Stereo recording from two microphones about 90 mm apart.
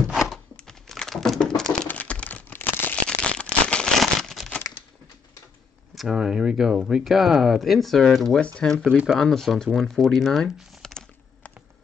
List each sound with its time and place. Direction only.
0.1 s a sound: centre (ahead or behind)
4.0 s crumpling: centre (ahead or behind)
5.9 s speech: 5° right (ahead or behind)
8.4 s speech: 10° left (ahead or behind)
8.9 s speech: 5° right (ahead or behind)